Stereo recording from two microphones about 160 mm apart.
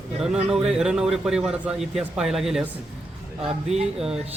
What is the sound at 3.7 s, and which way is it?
Speech, 45° right (ahead or behind).